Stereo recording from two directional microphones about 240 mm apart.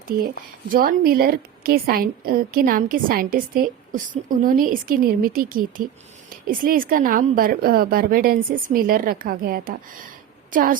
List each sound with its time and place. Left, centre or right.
0.7 s a woman's voice: right